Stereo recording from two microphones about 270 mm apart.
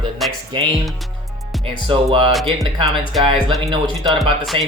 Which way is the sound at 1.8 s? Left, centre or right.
Centre.